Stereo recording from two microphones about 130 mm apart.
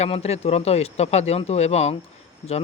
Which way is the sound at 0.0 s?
55° left (ahead or behind).